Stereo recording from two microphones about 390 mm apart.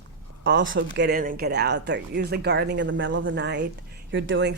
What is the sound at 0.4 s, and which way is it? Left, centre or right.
Speech, right.